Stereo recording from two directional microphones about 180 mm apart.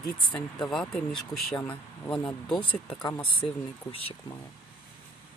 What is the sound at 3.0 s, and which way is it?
Speech, 30° left (ahead or behind).